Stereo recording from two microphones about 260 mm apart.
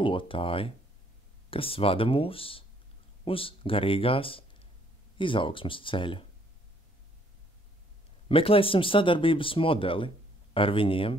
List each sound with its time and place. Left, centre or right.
0.0 s speech: centre
8.3 s speech: left